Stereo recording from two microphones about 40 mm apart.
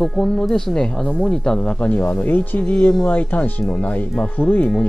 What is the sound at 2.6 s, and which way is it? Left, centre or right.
Speech, left.